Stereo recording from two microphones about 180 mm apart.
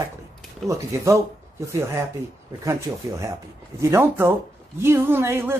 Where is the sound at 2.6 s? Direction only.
15° right (ahead or behind).